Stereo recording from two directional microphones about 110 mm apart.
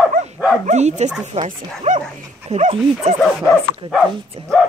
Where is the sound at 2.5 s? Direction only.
70° right (ahead or behind).